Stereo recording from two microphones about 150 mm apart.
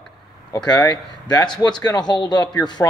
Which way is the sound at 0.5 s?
25° left (ahead or behind).